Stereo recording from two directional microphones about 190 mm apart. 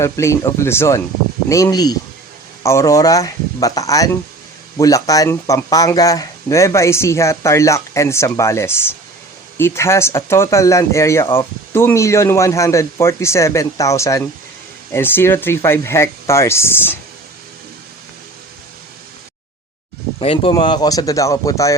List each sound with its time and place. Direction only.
0.0 s speech: 15° left (ahead or behind)
20.1 s speech: 30° left (ahead or behind)